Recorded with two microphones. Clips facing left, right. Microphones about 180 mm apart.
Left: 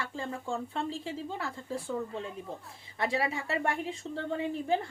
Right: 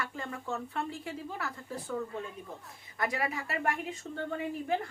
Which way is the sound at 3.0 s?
25° left (ahead or behind).